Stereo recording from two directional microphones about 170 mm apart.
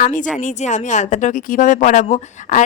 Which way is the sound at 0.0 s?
50° left (ahead or behind).